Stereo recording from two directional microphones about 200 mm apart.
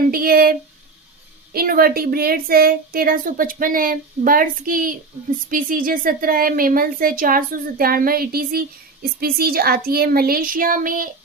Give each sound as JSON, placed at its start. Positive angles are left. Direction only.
{"t": 0.1, "sound": "a woman's voice", "side_deg": -50}
{"t": 1.5, "sound": "a woman's voice", "side_deg": -45}